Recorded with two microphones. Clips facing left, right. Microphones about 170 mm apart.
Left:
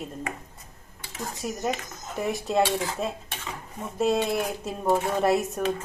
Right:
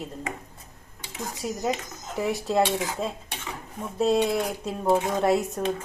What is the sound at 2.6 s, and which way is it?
Speech, 20° right (ahead or behind).